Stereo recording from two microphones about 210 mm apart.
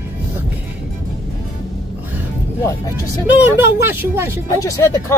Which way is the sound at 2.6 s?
15° left (ahead or behind).